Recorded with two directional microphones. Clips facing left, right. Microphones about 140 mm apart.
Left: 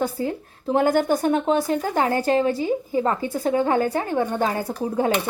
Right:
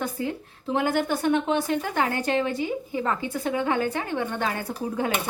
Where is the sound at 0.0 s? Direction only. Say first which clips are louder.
Left 4 dB; 35° left (ahead or behind).